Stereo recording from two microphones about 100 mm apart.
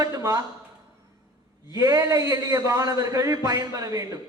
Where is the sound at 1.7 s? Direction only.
35° right (ahead or behind).